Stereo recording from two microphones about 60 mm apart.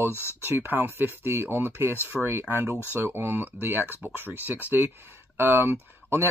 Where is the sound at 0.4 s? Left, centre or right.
Right.